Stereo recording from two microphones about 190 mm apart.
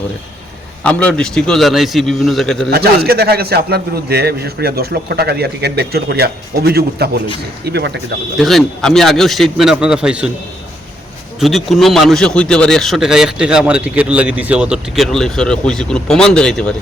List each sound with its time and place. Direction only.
0.9 s a man's voice: 5° left (ahead or behind)
2.6 s a man's voice: 55° right (ahead or behind)
8.4 s a man's voice: centre (ahead or behind)
11.3 s a man's voice: centre (ahead or behind)